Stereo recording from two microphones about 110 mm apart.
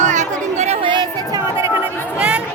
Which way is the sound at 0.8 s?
45° right (ahead or behind).